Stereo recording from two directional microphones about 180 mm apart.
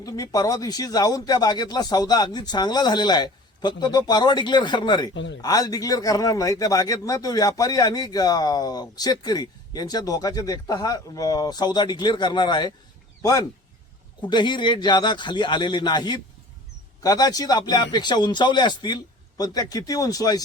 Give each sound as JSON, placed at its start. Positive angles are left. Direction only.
{"t": 0.0, "sound": "speech", "side_deg": 20}
{"t": 5.1, "sound": "speech", "side_deg": 80}
{"t": 5.4, "sound": "speech", "side_deg": 20}